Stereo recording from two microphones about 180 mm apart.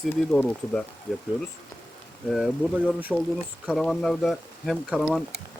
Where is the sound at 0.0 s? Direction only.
5° left (ahead or behind).